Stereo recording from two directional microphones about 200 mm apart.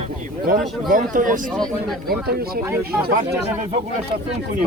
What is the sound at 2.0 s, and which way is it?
Speech, 50° right (ahead or behind).